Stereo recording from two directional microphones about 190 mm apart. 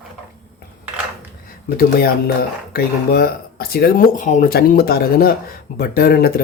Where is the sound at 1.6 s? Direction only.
55° left (ahead or behind).